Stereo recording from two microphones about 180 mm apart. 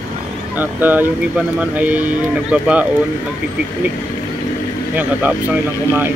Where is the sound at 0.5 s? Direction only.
10° right (ahead or behind).